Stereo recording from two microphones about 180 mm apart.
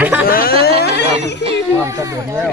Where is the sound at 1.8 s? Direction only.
15° right (ahead or behind).